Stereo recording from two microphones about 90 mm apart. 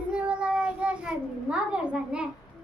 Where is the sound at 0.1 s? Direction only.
10° right (ahead or behind).